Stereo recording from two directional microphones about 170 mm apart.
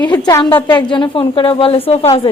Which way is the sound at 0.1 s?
25° left (ahead or behind).